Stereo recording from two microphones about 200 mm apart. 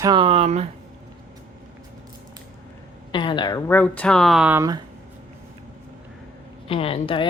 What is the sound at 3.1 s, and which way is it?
Speech, 25° left (ahead or behind).